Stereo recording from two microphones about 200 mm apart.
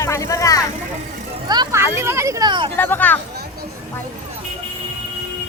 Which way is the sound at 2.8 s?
10° left (ahead or behind).